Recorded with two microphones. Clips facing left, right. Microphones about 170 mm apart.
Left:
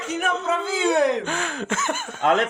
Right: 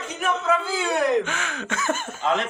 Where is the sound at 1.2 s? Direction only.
35° left (ahead or behind).